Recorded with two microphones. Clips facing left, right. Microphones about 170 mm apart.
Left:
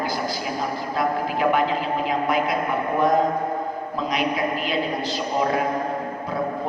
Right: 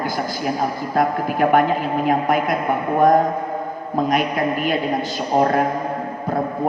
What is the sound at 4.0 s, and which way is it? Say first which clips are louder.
Speech: right 5 dB; 50° right (ahead or behind).